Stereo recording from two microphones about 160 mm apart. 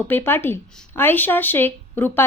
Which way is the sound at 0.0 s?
15° left (ahead or behind).